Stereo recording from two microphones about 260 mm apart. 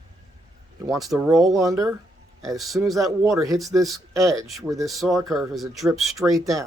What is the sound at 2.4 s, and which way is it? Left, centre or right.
Speech, centre.